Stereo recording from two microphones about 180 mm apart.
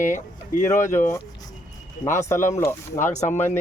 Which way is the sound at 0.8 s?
15° left (ahead or behind).